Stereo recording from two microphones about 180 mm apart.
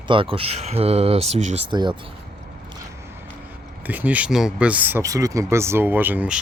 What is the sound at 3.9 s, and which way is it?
Speech, 10° right (ahead or behind).